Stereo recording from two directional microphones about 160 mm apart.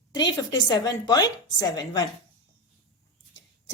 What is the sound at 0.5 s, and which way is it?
A woman's voice, 25° left (ahead or behind).